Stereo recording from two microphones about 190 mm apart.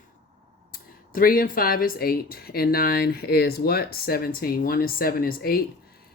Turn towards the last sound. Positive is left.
turn(degrees=50)  # may be behind; listen again after turning